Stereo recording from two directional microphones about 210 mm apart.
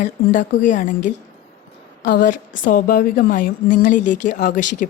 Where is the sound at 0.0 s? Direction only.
35° left (ahead or behind).